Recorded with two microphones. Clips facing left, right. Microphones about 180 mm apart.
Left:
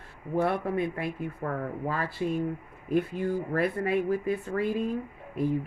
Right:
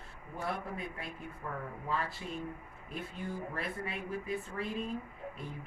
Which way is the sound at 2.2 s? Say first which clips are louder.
Left 13 dB; 60° left (ahead or behind).